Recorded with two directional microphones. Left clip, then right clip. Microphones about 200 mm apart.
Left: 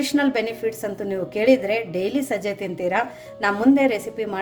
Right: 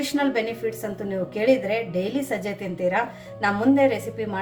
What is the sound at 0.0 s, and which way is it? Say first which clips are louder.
A woman's voice: left 2 dB; 45° left (ahead or behind).